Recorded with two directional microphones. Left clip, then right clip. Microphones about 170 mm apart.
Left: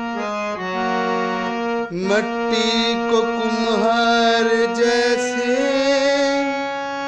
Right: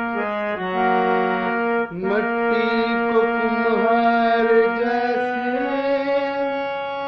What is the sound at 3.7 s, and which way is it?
Music, 80° left.